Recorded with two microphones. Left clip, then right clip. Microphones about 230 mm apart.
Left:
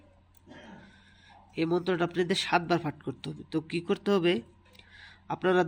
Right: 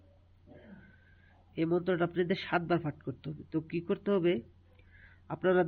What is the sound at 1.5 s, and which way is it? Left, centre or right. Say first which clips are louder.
A man's voice: left 2 dB; centre.